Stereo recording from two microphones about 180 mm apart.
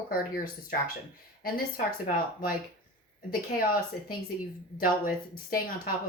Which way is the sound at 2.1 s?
50° left (ahead or behind).